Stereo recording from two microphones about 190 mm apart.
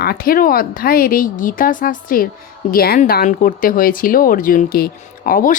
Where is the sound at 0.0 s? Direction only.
55° left (ahead or behind).